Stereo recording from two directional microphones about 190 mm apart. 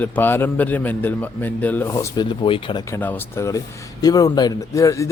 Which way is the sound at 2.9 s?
10° left (ahead or behind).